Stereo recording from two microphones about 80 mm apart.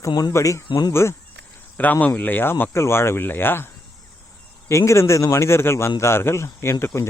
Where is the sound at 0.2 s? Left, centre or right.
Left.